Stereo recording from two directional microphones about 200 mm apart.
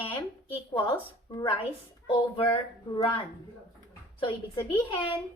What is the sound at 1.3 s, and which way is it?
Speech, 20° left (ahead or behind).